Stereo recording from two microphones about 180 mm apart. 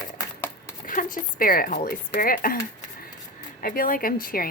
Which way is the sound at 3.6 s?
50° left (ahead or behind).